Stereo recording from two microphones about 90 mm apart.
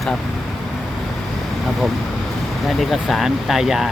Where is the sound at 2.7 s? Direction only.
Centre (ahead or behind).